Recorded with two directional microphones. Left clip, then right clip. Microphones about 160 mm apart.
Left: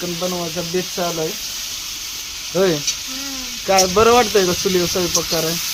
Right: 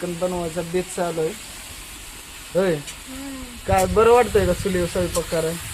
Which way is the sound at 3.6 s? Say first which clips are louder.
Left 3 dB; 90° left.